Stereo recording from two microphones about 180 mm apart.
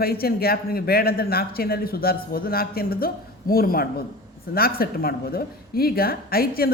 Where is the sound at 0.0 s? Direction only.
55° left (ahead or behind).